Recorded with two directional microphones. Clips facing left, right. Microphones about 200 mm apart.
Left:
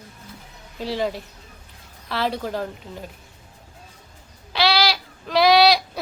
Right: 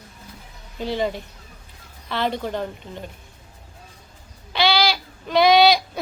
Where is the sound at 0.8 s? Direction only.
Centre (ahead or behind).